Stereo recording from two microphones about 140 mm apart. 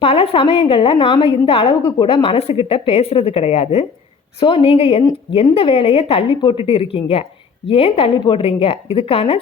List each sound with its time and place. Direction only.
0.0 s speech: 40° left (ahead or behind)